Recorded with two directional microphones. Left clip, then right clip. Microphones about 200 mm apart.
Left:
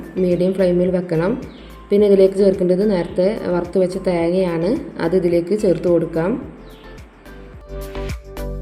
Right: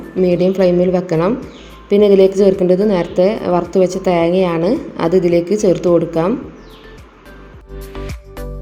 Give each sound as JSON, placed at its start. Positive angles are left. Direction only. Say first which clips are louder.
{"t": 0.2, "sound": "a woman's voice", "louder": "right 4 dB", "side_deg": -15}
{"t": 7.8, "sound": "music", "louder": "left 1 dB", "side_deg": 0}